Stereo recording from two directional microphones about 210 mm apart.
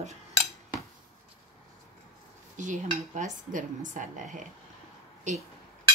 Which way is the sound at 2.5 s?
35° right (ahead or behind).